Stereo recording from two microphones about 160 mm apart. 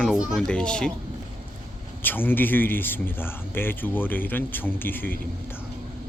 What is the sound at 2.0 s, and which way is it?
Speech, 10° left (ahead or behind).